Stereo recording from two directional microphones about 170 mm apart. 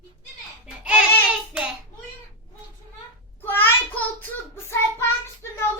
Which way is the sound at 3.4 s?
10° left (ahead or behind).